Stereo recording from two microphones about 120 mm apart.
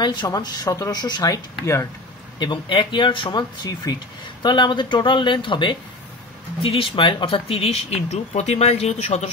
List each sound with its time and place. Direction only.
0.0 s speech: 40° left (ahead or behind); by 9.3 s 60° left (ahead or behind)